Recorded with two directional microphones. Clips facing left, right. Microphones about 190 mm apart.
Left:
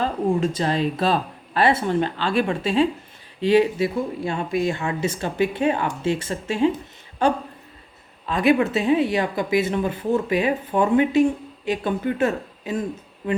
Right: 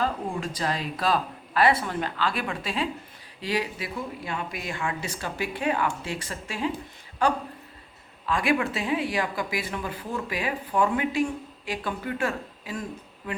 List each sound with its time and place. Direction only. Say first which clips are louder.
0.0 s speech: left 7 dB; 25° left (ahead or behind)